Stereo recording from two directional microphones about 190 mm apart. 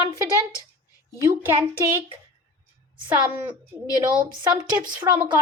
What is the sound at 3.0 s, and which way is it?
Speech, 10° right (ahead or behind).